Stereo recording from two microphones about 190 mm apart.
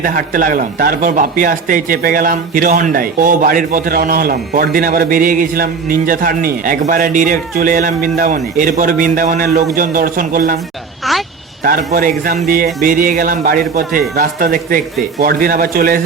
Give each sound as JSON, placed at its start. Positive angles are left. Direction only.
{"t": 0.0, "sound": "speech", "side_deg": -45}
{"t": 11.1, "sound": "a sound", "side_deg": 0}
{"t": 11.6, "sound": "speech", "side_deg": -50}